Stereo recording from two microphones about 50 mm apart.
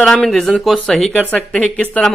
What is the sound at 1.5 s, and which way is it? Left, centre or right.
Speech, left.